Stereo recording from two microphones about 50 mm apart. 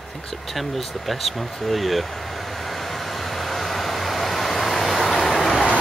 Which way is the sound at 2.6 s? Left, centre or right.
Centre.